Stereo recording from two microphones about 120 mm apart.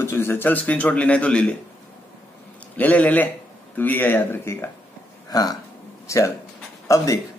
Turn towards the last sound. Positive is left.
turn(degrees=25)  # may be behind; listen again after turning